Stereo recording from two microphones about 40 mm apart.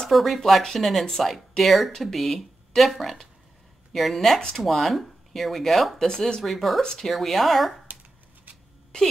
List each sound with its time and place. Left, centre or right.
0.1 s speech: centre
6.0 s speech: centre
6.4 s speech: centre
6.8 s speech: centre